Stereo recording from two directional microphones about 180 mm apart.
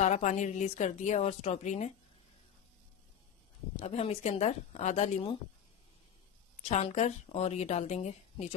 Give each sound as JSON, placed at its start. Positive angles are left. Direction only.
{"t": 0.0, "sound": "a woman's voice", "side_deg": 40}
{"t": 3.8, "sound": "a woman's voice", "side_deg": 35}
{"t": 6.7, "sound": "a woman's voice", "side_deg": 40}